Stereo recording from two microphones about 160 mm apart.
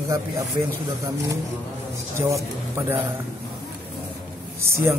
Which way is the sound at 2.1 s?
15° right (ahead or behind).